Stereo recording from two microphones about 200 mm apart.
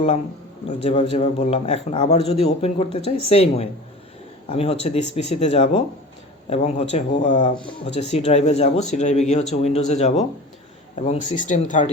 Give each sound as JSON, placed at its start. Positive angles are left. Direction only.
{"t": 0.9, "sound": "a man's voice", "side_deg": 30}